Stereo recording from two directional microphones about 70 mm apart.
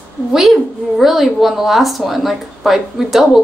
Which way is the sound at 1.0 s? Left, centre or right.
Centre.